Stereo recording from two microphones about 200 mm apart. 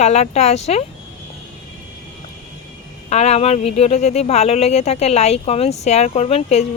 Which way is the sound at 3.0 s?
35° left (ahead or behind).